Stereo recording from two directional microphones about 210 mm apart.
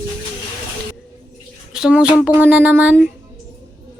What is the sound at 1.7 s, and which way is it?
Speech, 5° right (ahead or behind).